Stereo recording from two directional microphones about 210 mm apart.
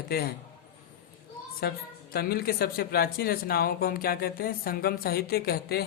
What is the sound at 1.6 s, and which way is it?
Speech, 45° left (ahead or behind).